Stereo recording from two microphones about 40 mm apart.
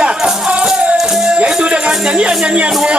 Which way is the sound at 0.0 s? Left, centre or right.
Right.